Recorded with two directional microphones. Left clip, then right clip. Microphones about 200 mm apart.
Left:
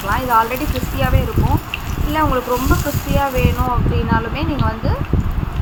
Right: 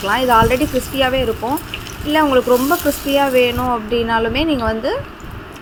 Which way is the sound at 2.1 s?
30° right (ahead or behind).